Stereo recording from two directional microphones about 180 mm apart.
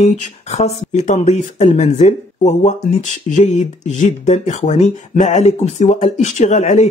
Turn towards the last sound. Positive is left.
turn(degrees=40)  # may be behind; listen again after turning